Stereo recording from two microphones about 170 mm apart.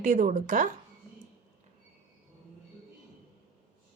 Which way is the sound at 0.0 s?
50° right (ahead or behind).